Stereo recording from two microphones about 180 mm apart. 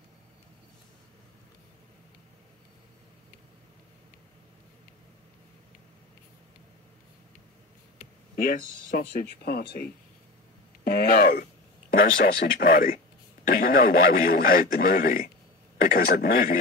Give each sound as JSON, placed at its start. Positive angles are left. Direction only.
{"t": 8.0, "sound": "a man's voice", "side_deg": 55}